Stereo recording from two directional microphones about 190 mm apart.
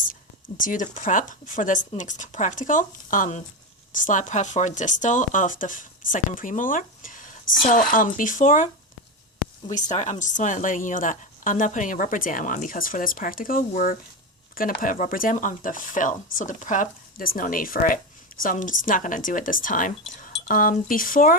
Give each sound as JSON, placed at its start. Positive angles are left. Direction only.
{"t": 0.1, "sound": "speech", "side_deg": 45}
{"t": 9.7, "sound": "speech", "side_deg": 40}